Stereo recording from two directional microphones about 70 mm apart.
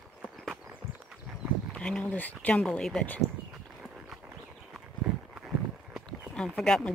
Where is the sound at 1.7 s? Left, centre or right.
Centre.